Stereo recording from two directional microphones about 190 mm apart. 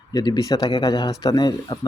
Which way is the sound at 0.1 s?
20° left (ahead or behind).